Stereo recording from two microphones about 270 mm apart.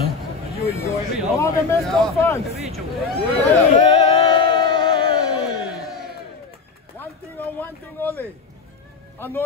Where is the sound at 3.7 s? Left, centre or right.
Left.